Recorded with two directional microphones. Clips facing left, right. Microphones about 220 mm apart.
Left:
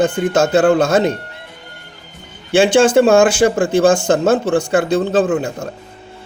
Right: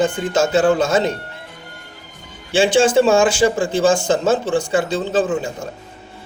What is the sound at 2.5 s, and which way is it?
Speech, 60° left (ahead or behind).